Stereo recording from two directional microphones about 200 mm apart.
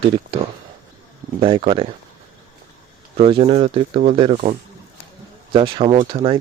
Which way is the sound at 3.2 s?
25° right (ahead or behind).